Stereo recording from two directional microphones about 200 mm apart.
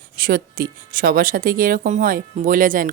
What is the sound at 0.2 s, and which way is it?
A woman's voice, 45° right (ahead or behind).